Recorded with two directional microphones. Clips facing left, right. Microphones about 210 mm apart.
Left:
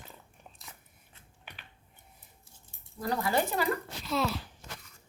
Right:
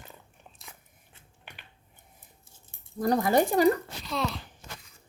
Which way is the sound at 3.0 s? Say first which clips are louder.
Right 6 dB; 45° right (ahead or behind).